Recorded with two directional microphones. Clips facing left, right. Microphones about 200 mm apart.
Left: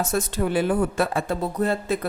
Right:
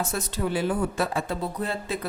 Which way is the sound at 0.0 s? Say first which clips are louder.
Left 4 dB; 50° left (ahead or behind).